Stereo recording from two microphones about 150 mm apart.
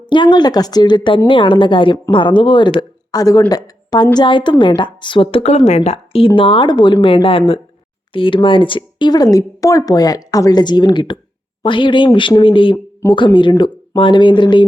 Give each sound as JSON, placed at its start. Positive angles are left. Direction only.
{"t": 0.1, "sound": "a woman's voice", "side_deg": 30}